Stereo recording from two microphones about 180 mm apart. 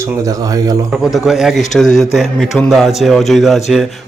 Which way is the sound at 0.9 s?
Centre (ahead or behind).